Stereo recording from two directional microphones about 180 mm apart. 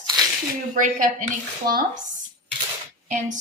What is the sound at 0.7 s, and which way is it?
Speech, 45° right (ahead or behind).